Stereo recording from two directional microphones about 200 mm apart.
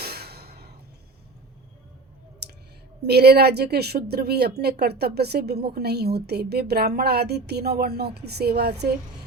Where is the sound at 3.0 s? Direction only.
55° right (ahead or behind).